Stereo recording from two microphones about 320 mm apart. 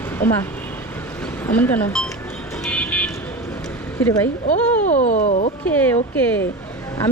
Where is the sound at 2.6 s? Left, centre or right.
Centre.